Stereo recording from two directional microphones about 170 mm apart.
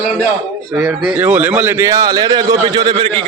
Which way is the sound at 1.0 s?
5° right (ahead or behind).